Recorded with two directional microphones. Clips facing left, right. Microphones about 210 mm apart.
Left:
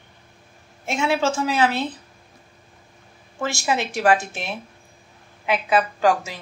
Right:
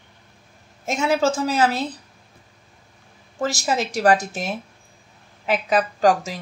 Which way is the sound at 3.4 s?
40° right (ahead or behind).